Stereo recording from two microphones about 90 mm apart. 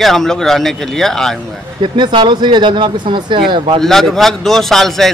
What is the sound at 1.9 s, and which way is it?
Speech, 60° right (ahead or behind).